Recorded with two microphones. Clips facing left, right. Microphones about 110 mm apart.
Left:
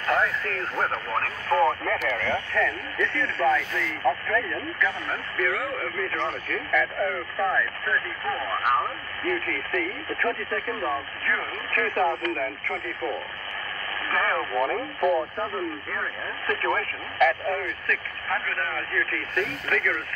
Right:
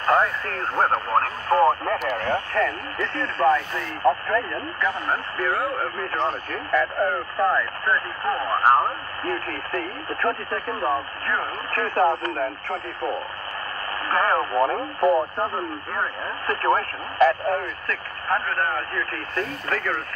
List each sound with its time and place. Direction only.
0.0 s speech: 35° right (ahead or behind)